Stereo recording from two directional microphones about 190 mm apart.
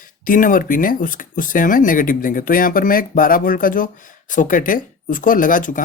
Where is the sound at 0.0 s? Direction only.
45° left (ahead or behind).